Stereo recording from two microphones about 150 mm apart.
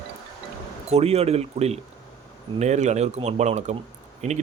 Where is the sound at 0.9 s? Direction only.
45° right (ahead or behind).